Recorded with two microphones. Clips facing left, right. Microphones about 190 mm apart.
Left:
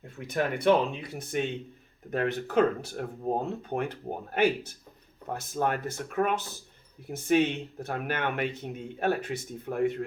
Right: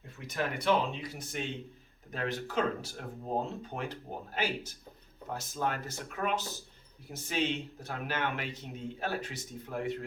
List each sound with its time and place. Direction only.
0.3 s speech: 55° left (ahead or behind)